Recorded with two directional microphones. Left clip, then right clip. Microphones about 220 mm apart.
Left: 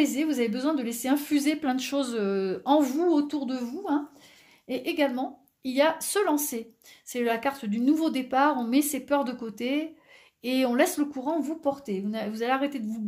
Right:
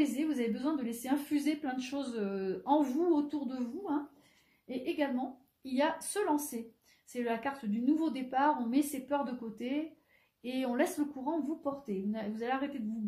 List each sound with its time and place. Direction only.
0.0 s a woman's voice: 40° left (ahead or behind)